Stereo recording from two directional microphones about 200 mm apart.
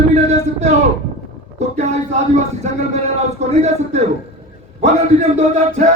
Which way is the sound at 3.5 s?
35° right (ahead or behind).